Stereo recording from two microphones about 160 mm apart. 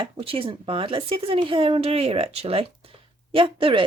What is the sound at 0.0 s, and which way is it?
A woman's voice, 35° right (ahead or behind).